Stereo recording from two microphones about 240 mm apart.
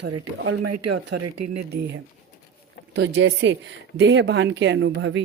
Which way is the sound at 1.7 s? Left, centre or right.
Right.